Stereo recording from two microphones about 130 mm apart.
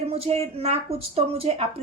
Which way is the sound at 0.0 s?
50° right (ahead or behind).